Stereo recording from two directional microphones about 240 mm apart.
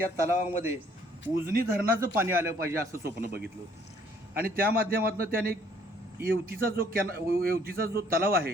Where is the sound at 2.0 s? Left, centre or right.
Centre.